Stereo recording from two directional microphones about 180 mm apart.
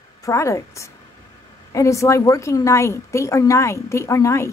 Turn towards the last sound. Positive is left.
turn(degrees=15)  # may be behind; listen again after turning